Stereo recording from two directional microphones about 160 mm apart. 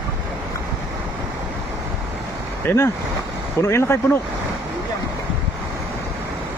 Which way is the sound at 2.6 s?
15° left (ahead or behind).